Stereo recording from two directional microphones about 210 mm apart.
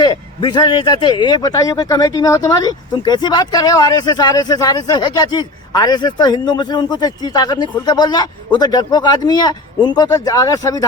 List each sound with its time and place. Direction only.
0.0 s a man's voice: 20° left (ahead or behind)